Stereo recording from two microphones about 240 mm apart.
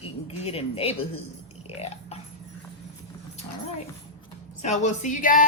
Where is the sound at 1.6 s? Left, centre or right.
Left.